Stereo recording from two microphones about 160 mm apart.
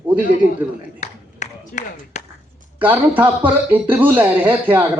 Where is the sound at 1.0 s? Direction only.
45° left (ahead or behind).